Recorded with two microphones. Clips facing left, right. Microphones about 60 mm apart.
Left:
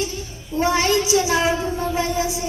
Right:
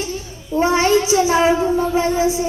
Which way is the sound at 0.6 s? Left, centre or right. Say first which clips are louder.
Right 4 dB; right.